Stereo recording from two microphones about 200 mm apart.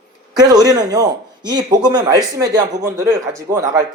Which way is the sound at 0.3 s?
20° right (ahead or behind).